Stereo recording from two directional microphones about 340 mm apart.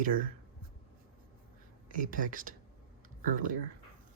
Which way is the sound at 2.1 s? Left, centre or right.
Right.